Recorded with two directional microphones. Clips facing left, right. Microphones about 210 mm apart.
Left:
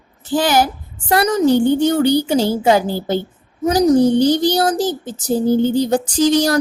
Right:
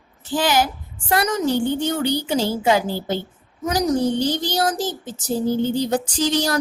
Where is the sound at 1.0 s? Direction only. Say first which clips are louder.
Left 6 dB; 30° left (ahead or behind).